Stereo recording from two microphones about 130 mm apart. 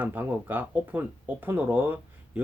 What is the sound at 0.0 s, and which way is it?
Speech, 15° right (ahead or behind).